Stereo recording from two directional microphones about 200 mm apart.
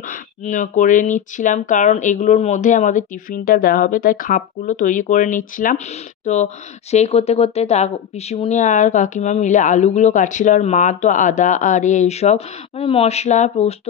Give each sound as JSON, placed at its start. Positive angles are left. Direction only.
{"t": 0.1, "sound": "a woman's voice", "side_deg": 40}